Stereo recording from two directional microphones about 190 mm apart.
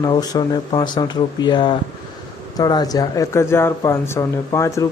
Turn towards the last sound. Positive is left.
turn(degrees=15)  # may be behind; listen again after turning